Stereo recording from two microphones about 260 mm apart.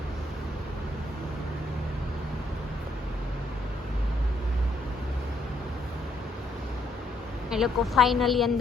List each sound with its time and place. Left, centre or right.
7.5 s a woman's voice: centre